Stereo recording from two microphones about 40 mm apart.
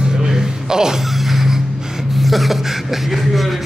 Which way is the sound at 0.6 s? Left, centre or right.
Centre.